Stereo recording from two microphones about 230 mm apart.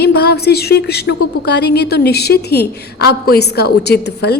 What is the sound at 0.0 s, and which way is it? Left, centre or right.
A woman's voice, left.